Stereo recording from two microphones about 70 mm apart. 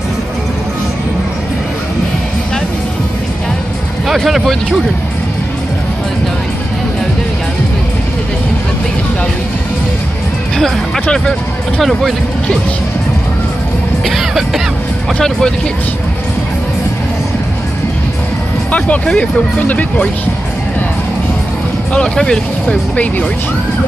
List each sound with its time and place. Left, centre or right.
4.1 s speech: centre
10.6 s speech: centre
14.0 s speech: centre
18.7 s speech: centre
21.9 s speech: centre